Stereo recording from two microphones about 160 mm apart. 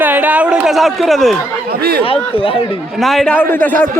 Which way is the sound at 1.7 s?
80° right.